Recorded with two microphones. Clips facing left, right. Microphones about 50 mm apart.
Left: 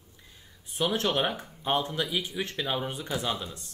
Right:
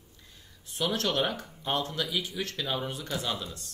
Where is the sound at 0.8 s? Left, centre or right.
Centre.